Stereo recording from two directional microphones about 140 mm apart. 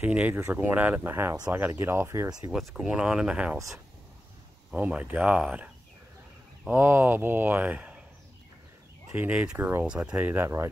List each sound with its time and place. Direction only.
0.0 s speech: 10° right (ahead or behind)
2.5 s speech: 5° right (ahead or behind)
4.7 s speech: 10° right (ahead or behind)
6.7 s speech: 15° right (ahead or behind)
9.1 s speech: 10° right (ahead or behind)